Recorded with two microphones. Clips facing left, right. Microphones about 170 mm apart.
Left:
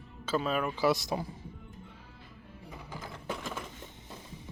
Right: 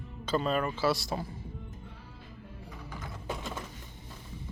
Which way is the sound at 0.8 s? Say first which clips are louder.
Left 1 dB; 20° left (ahead or behind).